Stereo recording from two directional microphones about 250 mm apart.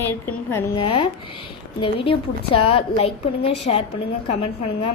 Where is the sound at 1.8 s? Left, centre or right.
Left.